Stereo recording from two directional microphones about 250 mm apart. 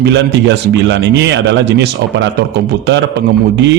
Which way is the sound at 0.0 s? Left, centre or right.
Right.